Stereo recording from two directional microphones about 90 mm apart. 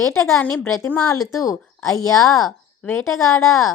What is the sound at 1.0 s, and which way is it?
A woman's voice, 40° left (ahead or behind).